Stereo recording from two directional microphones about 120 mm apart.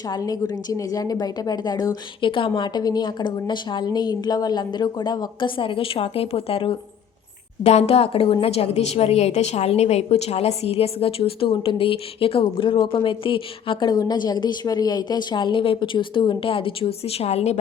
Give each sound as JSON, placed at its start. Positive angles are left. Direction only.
{"t": 0.1, "sound": "a woman's voice", "side_deg": 30}
{"t": 7.6, "sound": "a woman's voice", "side_deg": 60}